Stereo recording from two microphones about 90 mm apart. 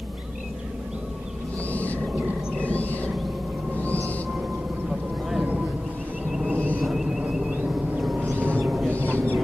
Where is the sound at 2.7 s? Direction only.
15° left (ahead or behind).